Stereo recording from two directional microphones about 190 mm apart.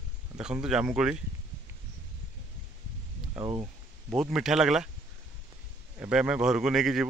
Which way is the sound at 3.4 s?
15° right (ahead or behind).